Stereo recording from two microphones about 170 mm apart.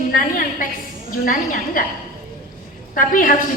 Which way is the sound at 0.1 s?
55° left (ahead or behind).